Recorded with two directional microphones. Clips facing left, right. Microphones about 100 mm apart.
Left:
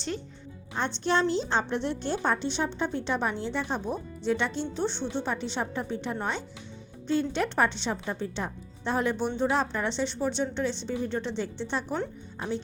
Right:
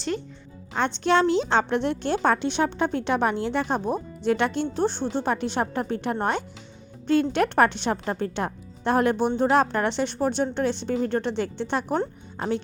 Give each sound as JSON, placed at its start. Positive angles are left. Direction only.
{"t": 1.0, "sound": "a woman's voice", "side_deg": -75}
{"t": 5.3, "sound": "a woman's voice", "side_deg": -60}